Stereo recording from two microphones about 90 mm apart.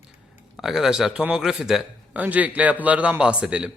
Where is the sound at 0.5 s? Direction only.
5° right (ahead or behind).